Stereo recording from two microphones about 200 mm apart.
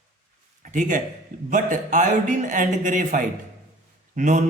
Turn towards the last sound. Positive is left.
turn(degrees=-40)  # may be behind; listen again after turning